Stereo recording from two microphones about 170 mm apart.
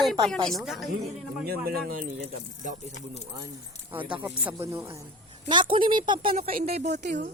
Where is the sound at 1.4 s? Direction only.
65° right (ahead or behind).